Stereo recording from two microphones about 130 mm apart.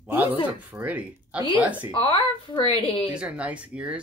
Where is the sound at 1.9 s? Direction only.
45° left (ahead or behind).